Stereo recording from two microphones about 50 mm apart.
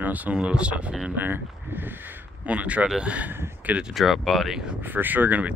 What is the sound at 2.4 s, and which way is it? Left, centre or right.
Speech, right.